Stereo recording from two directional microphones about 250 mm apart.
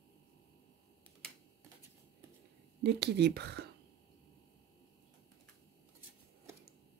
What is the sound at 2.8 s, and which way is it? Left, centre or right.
Speech, right.